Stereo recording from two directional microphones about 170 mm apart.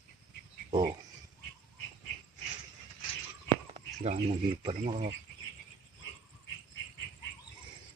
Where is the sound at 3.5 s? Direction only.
40° right (ahead or behind).